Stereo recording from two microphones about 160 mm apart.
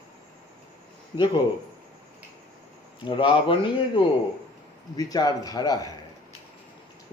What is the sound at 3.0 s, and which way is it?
Speech, 30° left (ahead or behind).